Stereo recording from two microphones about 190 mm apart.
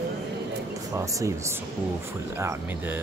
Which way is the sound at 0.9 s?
15° right (ahead or behind).